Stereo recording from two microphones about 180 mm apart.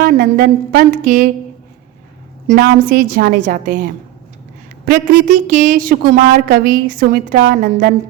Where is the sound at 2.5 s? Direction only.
55° right (ahead or behind).